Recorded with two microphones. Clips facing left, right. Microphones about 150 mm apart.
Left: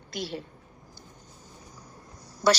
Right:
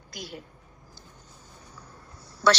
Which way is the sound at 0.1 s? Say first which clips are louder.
Left 6 dB; 25° left (ahead or behind).